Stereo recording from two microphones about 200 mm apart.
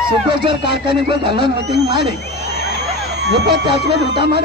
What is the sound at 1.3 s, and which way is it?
Speech, 25° right (ahead or behind).